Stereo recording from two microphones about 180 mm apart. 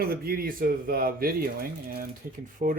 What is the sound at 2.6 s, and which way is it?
Speech, 40° right (ahead or behind).